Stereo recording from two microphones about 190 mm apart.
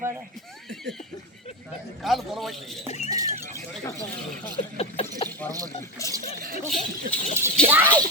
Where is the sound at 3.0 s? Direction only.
20° right (ahead or behind).